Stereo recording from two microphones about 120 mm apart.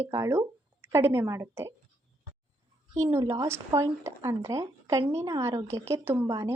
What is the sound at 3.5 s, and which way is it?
Speech, 25° right (ahead or behind).